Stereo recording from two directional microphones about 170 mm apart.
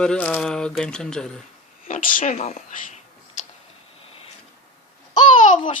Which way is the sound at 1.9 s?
50° left (ahead or behind).